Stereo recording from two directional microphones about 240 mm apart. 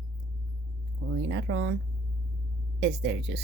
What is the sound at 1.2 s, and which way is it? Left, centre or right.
Speech, right.